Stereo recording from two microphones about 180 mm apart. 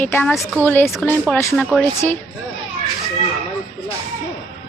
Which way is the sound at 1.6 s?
5° left (ahead or behind).